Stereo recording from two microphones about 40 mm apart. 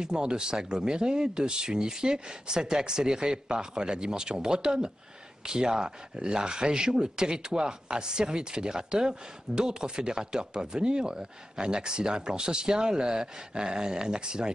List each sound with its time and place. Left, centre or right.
0.0 s speech: right